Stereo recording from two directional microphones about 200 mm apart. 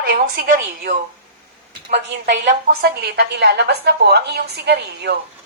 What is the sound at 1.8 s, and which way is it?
A woman's voice, 60° right (ahead or behind).